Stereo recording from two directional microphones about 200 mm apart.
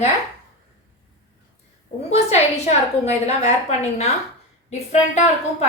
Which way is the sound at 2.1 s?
35° left (ahead or behind).